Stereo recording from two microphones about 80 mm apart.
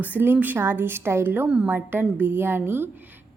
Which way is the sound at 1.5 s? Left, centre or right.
Centre.